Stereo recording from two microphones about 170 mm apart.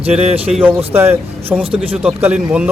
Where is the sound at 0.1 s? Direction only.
5° right (ahead or behind).